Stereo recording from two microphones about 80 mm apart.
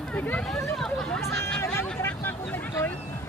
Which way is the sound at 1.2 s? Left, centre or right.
Left.